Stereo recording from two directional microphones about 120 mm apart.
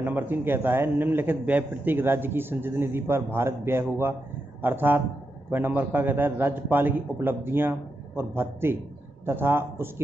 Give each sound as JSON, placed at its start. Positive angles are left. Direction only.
{"t": 0.0, "sound": "a man's voice", "side_deg": -15}